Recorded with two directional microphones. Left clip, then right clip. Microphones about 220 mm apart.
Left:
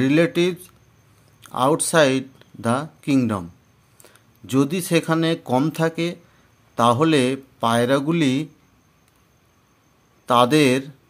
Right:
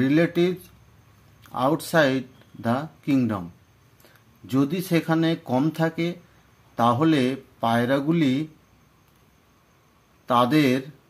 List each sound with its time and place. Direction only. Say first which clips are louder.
0.0 s a man's voice: left 3 dB; 30° left (ahead or behind)
4.5 s speech: left 3 dB; 30° left (ahead or behind)
10.2 s a man's voice: left 4 dB; 30° left (ahead or behind)